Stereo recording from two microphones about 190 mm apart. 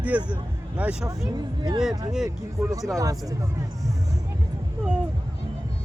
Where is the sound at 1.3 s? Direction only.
20° right (ahead or behind).